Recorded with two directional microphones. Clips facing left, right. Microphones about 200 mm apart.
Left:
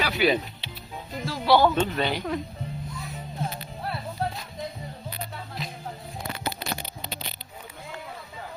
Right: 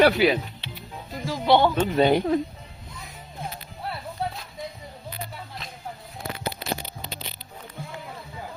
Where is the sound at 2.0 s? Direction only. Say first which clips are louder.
Right 8 dB; 50° right (ahead or behind).